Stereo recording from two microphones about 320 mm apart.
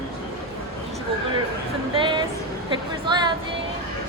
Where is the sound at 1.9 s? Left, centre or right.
Centre.